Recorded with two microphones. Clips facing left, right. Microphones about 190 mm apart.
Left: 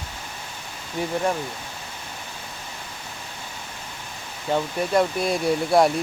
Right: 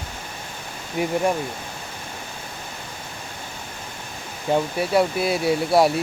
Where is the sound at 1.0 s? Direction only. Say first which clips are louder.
Right 3 dB; 15° right (ahead or behind).